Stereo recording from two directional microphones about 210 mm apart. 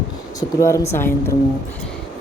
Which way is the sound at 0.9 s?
10° left (ahead or behind).